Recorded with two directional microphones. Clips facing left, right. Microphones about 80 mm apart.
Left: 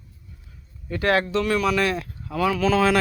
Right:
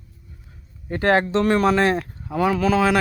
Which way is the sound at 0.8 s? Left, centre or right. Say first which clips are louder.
Right 3 dB; right.